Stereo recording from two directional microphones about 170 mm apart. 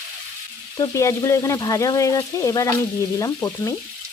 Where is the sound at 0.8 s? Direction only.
20° left (ahead or behind).